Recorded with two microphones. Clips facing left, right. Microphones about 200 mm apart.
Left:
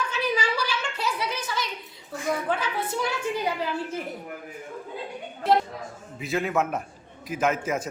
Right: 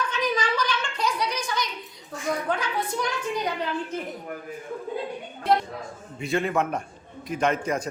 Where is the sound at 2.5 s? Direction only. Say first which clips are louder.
Even; 5° left (ahead or behind).